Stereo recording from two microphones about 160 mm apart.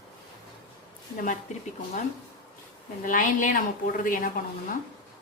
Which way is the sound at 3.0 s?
55° left (ahead or behind).